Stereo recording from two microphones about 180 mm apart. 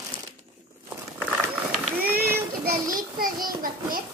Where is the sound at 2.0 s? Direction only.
55° right (ahead or behind).